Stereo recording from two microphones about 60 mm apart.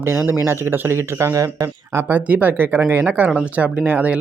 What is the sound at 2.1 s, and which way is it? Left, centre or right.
Speech, right.